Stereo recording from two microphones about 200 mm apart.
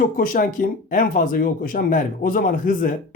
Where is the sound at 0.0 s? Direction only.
45° left (ahead or behind).